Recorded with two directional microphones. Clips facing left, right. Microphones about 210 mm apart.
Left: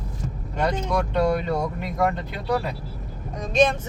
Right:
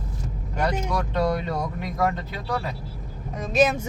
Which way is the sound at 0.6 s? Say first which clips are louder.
Left 2 dB; 10° right (ahead or behind).